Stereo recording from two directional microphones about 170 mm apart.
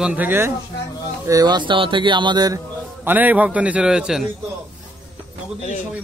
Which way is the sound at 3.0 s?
10° right (ahead or behind).